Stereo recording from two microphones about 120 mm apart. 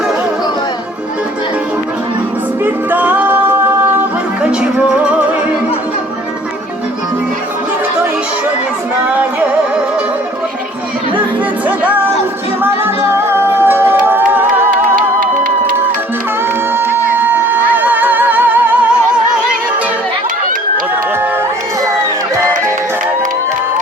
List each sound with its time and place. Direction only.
2.6 s music: 15° right (ahead or behind)
4.6 s music: 10° right (ahead or behind)
9.0 s music: 10° right (ahead or behind)
13.1 s music: 20° right (ahead or behind)
16.7 s music: 20° right (ahead or behind)